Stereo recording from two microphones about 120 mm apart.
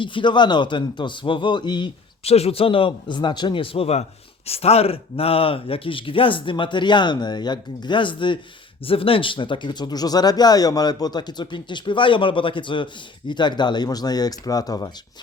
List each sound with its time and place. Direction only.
0.0 s speech: 45° left (ahead or behind)
2.2 s speech: 60° left (ahead or behind); by 14.9 s 30° left (ahead or behind)